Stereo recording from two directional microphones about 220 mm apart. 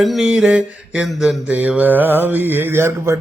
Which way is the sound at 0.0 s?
Centre (ahead or behind).